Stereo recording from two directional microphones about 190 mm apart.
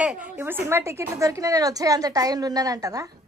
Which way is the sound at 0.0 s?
10° right (ahead or behind).